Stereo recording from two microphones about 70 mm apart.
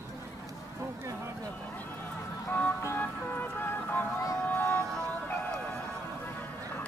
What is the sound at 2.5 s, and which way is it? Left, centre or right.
Vehicle, left.